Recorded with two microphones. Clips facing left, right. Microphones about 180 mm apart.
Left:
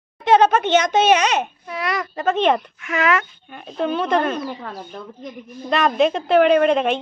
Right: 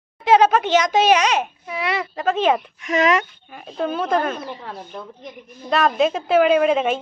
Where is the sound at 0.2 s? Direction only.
Centre (ahead or behind).